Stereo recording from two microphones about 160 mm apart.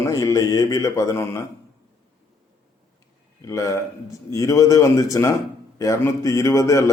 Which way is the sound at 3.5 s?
20° left (ahead or behind).